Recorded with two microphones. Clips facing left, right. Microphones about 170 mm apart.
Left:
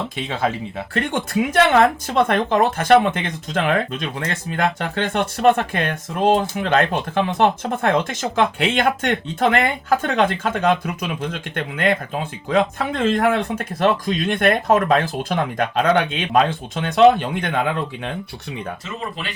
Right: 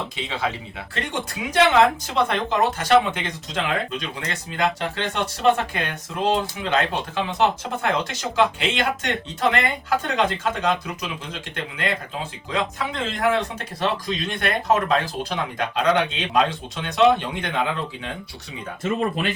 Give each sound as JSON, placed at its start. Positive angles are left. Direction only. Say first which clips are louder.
{"t": 0.9, "sound": "speech", "louder": "left 8 dB", "side_deg": 55}